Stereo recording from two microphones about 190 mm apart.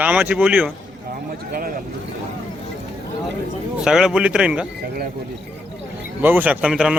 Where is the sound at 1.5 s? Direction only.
50° right (ahead or behind).